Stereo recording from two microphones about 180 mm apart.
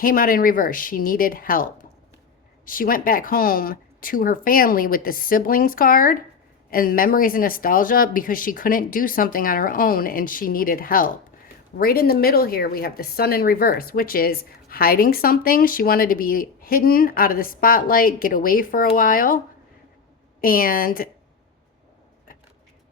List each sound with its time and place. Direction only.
0.0 s speech: 50° left (ahead or behind)
20.4 s speech: 50° left (ahead or behind)